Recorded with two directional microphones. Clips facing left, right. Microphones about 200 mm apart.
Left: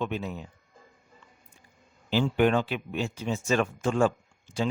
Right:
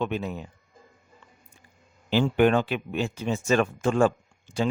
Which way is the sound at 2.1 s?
60° right (ahead or behind).